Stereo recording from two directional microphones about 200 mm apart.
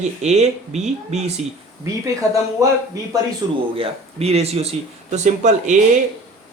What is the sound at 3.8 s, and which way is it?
Speech, 30° right (ahead or behind).